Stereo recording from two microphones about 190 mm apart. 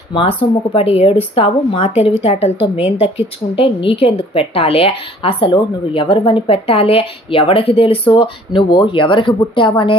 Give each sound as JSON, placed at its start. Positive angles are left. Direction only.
{"t": 0.1, "sound": "a woman's voice", "side_deg": 25}